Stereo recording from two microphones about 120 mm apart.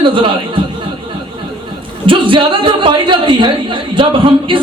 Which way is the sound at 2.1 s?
45° right (ahead or behind).